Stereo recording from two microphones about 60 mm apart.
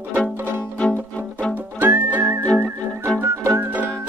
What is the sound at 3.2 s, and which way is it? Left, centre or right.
Music, right.